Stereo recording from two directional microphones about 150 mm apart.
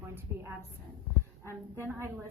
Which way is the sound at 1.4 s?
15° right (ahead or behind).